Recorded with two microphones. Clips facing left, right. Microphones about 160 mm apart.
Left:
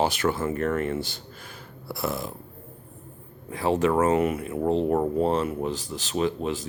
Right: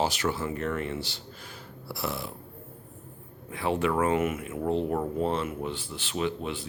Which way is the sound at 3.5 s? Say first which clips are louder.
Left 4 dB; 40° left (ahead or behind).